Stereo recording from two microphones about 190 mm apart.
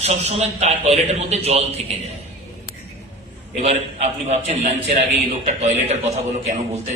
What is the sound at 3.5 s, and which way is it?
A man's voice, 35° right (ahead or behind).